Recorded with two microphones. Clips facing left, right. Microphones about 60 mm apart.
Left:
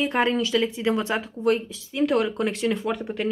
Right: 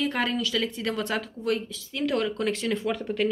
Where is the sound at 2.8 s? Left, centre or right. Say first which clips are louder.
Even; centre.